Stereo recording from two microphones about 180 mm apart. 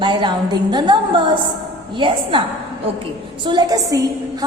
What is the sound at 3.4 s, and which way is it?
Speech, 25° right (ahead or behind).